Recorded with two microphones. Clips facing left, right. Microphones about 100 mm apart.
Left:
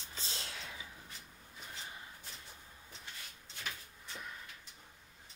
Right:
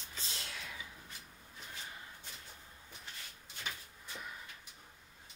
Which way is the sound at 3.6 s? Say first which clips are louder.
Even; 10° right (ahead or behind).